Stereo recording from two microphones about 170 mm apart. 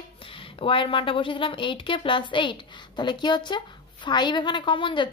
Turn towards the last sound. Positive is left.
turn(degrees=30)  # may be behind; listen again after turning